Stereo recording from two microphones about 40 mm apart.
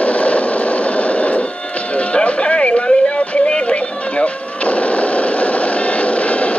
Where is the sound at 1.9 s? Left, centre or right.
Left.